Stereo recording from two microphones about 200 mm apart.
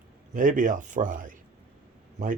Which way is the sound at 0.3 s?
40° right (ahead or behind).